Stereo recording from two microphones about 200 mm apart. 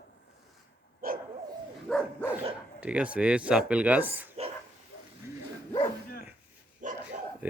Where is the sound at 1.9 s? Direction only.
5° right (ahead or behind).